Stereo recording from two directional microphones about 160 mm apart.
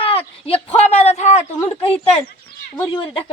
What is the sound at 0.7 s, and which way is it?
A woman's voice, 40° left (ahead or behind).